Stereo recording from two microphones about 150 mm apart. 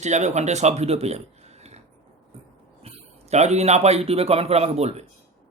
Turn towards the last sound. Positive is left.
turn(degrees=-45)  # may be behind; listen again after turning